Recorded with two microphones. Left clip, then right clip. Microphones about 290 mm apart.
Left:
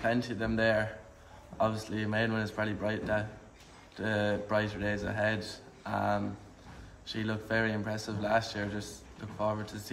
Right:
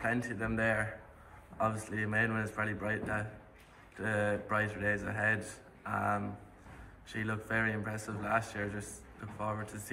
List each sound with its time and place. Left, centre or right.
0.0 s a man's voice: left